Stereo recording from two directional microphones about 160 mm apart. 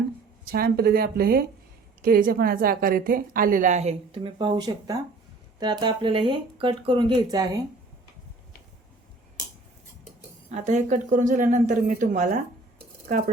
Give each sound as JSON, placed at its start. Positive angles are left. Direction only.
{"t": 0.5, "sound": "a woman's voice", "side_deg": -70}
{"t": 10.5, "sound": "a woman's voice", "side_deg": -45}